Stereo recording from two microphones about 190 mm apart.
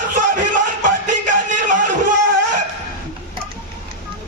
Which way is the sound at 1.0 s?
45° right (ahead or behind).